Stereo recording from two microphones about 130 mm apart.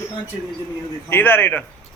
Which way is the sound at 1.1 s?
15° left (ahead or behind).